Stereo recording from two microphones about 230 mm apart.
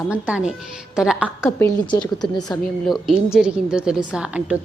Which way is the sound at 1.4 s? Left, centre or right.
Centre.